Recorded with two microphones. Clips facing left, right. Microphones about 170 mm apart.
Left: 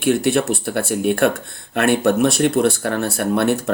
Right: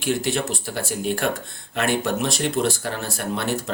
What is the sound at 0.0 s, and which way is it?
Speech, 60° left (ahead or behind).